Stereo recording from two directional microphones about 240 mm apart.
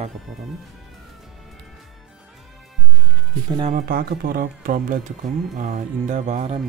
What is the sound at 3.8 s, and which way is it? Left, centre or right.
Speech, right.